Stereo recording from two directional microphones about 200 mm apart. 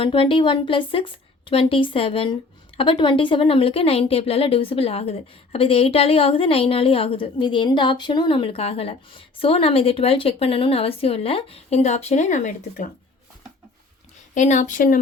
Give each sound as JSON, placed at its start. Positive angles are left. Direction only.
{"t": 0.0, "sound": "a woman's voice", "side_deg": 25}
{"t": 14.3, "sound": "a woman's voice", "side_deg": 35}